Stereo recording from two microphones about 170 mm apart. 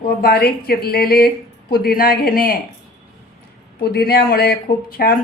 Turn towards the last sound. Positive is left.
turn(degrees=60)  # may be behind; listen again after turning